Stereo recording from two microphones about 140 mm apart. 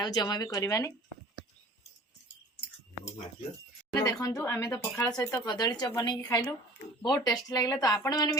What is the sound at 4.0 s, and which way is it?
Speech, 25° left (ahead or behind).